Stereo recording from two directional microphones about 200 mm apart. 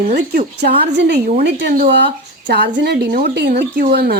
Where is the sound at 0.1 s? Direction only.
50° right (ahead or behind).